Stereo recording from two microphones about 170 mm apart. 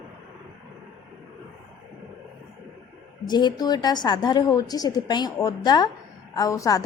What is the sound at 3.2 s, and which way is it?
A woman's voice, 25° left (ahead or behind).